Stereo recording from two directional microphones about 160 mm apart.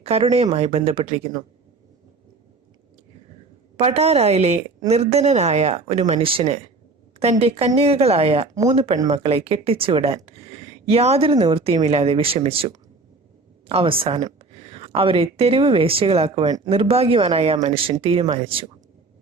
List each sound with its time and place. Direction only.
0.0 s speech: 40° right (ahead or behind)
3.8 s speech: 40° right (ahead or behind)